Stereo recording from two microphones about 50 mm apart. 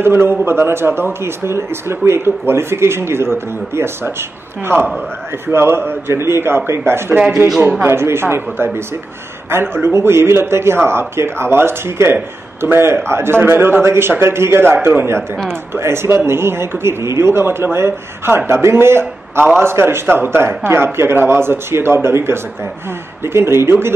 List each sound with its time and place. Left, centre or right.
0.0 s a man's voice: right
5.5 s a man's voice: right
15.7 s a man's voice: right